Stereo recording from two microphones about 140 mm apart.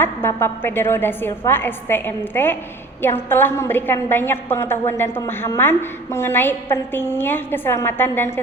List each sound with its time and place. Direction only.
0.0 s a woman's voice: 15° left (ahead or behind)